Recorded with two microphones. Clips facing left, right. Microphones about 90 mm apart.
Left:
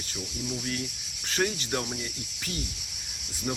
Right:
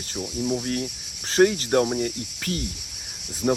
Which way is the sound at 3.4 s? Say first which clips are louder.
Right 10 dB; 60° right (ahead or behind).